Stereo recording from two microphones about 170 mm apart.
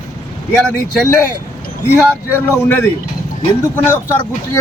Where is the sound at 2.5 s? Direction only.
15° left (ahead or behind).